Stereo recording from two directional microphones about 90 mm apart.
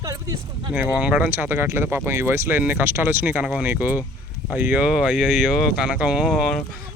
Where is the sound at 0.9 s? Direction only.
10° right (ahead or behind).